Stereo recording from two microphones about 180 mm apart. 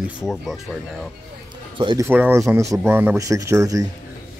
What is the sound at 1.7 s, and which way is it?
Speech, 25° right (ahead or behind).